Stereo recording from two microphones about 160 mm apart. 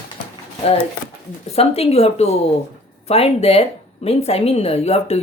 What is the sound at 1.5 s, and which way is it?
A woman's voice, 40° left (ahead or behind).